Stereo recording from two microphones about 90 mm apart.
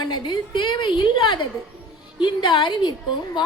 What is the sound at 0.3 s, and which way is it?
A woman's voice, 55° left (ahead or behind).